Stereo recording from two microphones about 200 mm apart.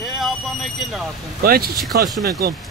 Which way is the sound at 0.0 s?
Centre (ahead or behind).